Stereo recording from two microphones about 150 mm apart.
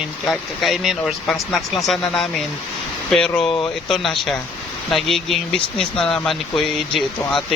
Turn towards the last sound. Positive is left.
turn(degrees=0)  # may be behind; listen again after turning